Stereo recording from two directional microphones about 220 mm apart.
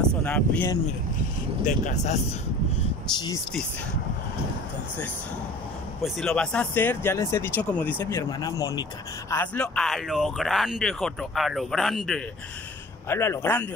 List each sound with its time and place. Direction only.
0.2 s speech: 10° left (ahead or behind)
1.6 s speech: 35° left (ahead or behind)
5.9 s speech: centre (ahead or behind)
13.1 s speech: 10° left (ahead or behind)